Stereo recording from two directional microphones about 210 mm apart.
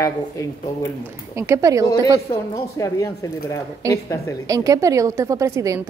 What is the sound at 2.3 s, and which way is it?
Speech, 15° left (ahead or behind).